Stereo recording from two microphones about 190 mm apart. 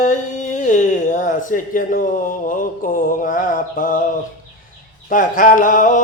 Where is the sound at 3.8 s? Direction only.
45° left (ahead or behind).